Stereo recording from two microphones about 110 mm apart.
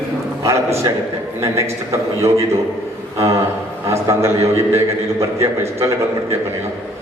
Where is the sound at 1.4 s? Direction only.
25° right (ahead or behind).